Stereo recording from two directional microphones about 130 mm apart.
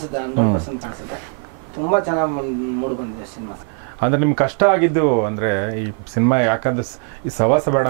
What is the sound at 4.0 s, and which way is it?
Speech, 15° right (ahead or behind).